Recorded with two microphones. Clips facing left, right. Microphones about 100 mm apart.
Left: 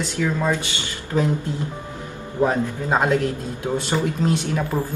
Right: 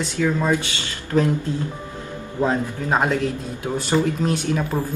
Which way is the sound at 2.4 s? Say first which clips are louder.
Left 1 dB; 20° left (ahead or behind).